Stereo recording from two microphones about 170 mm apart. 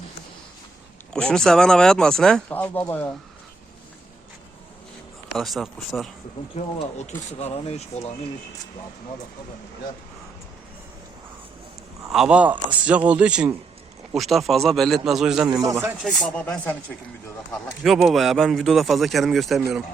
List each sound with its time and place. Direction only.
1.1 s speech: 5° left (ahead or behind)
5.4 s speech: centre (ahead or behind)
6.7 s speech: 40° left (ahead or behind)
12.0 s speech: centre (ahead or behind)
17.8 s speech: centre (ahead or behind)